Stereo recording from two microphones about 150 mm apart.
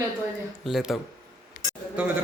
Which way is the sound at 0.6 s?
Centre (ahead or behind).